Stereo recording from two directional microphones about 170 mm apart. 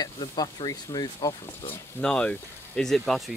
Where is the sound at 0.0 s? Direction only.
25° left (ahead or behind).